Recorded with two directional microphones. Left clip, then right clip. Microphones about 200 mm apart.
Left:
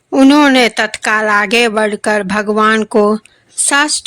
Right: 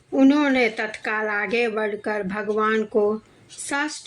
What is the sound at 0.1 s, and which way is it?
Speech, 45° left (ahead or behind).